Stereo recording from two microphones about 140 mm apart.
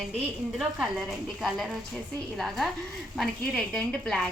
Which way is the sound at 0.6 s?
Centre (ahead or behind).